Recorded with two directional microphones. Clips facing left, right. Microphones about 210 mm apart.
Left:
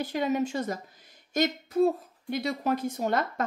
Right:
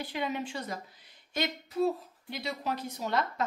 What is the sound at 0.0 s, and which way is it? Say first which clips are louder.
A woman's voice: left 7 dB; 45° left (ahead or behind).